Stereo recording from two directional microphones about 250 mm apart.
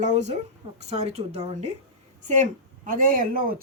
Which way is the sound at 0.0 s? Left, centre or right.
Right.